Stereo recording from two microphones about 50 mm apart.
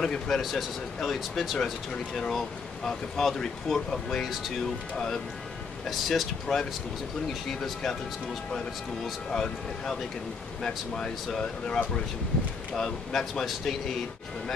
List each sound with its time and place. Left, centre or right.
0.0 s speech: centre
0.4 s speech: centre
4.9 s speech: centre
9.3 s speech: centre